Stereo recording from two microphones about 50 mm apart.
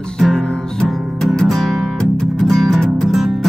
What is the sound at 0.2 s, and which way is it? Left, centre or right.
Music, centre.